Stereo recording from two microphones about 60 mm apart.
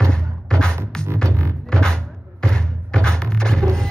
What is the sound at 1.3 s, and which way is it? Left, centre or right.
Music, right.